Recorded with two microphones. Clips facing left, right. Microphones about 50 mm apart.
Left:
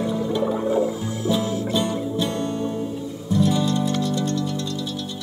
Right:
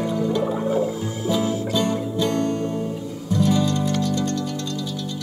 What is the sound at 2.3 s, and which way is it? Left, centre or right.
Music, right.